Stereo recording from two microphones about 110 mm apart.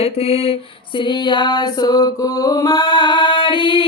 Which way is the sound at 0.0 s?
65° left (ahead or behind).